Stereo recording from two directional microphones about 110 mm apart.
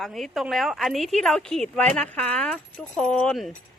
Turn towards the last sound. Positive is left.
turn(degrees=5)  # may be behind; listen again after turning